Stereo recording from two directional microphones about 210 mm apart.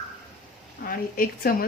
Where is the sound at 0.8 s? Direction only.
45° left (ahead or behind).